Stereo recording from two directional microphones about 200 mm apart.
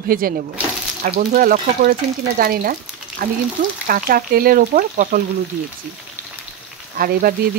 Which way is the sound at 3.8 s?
45° right (ahead or behind).